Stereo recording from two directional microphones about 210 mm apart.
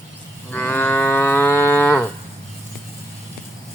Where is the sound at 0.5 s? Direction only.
10° left (ahead or behind).